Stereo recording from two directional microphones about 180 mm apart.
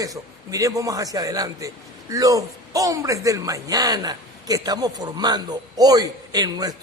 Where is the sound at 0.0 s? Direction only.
20° right (ahead or behind).